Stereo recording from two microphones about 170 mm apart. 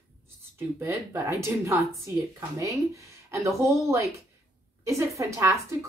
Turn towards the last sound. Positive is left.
turn(degrees=-15)  # may be behind; listen again after turning